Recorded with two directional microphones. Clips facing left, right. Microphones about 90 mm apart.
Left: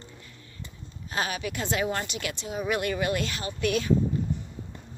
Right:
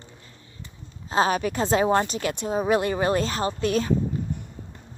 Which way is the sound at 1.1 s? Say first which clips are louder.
Right 8 dB; 35° right (ahead or behind).